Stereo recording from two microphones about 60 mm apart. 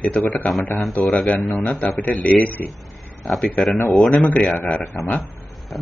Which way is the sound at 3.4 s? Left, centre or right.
Centre.